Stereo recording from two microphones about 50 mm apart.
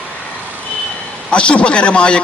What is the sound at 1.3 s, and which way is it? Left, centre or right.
Speech, left.